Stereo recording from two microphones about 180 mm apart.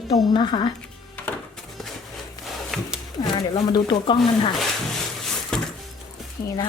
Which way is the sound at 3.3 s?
25° left (ahead or behind).